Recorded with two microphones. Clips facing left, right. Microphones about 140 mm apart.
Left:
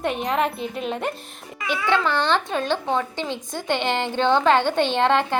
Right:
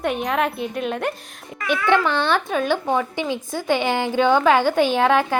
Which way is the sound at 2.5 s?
5° right (ahead or behind).